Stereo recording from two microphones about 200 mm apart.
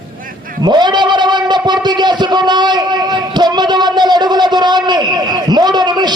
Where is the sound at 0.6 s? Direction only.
20° right (ahead or behind).